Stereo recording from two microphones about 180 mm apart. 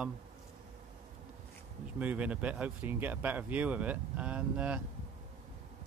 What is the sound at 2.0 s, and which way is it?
Speech, 10° right (ahead or behind).